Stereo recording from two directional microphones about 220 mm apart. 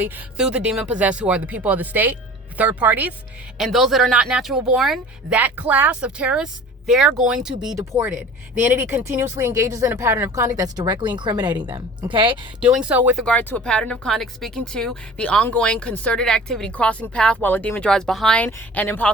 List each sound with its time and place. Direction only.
0.0 s speech: 5° right (ahead or behind)
7.8 s speech: 15° right (ahead or behind)
12.5 s speech: 5° right (ahead or behind)
13.2 s speech: 10° left (ahead or behind)